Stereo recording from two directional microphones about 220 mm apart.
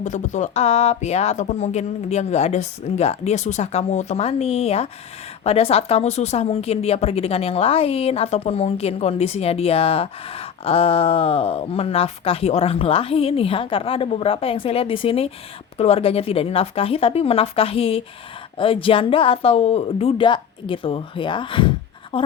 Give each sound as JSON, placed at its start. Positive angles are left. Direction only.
{"t": 0.0, "sound": "a woman's voice", "side_deg": 35}